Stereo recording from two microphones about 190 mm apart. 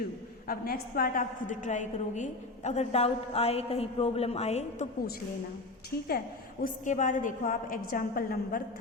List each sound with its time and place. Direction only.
0.4 s a woman's voice: 50° left (ahead or behind); by 4.9 s 35° left (ahead or behind)
6.1 s a woman's voice: 50° left (ahead or behind)